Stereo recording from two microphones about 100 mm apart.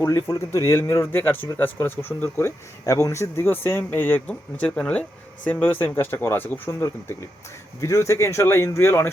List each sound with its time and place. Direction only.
0.0 s speech: 30° left (ahead or behind)